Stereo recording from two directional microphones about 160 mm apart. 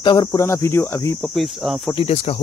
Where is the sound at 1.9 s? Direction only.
40° left (ahead or behind).